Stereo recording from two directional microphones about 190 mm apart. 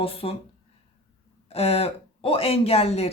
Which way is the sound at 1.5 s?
30° left (ahead or behind).